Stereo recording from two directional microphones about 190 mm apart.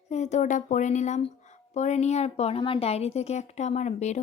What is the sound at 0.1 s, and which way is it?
A woman's voice, 40° left (ahead or behind).